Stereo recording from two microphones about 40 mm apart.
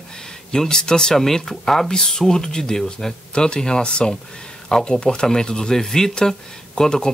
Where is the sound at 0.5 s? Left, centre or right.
Centre.